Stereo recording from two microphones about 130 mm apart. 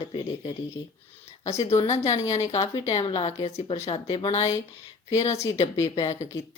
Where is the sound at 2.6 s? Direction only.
30° left (ahead or behind).